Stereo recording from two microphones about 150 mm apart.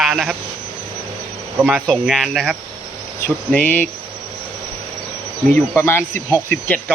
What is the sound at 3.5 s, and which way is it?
Speech, 10° left (ahead or behind).